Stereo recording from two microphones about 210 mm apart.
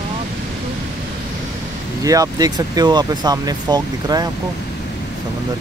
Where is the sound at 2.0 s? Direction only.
15° right (ahead or behind).